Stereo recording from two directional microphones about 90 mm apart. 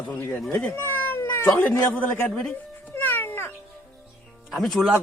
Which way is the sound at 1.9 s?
20° left (ahead or behind).